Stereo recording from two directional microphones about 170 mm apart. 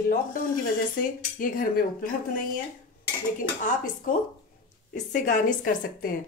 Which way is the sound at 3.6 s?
50° left (ahead or behind).